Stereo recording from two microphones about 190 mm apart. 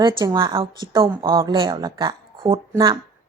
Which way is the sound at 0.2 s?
25° right (ahead or behind).